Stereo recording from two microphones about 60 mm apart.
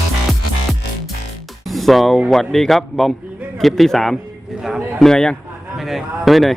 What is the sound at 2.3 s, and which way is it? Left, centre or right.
Speech, centre.